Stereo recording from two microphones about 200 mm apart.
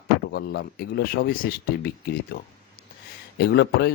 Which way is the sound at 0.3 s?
55° left (ahead or behind).